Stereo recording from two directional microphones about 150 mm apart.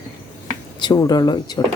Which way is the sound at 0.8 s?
25° left (ahead or behind).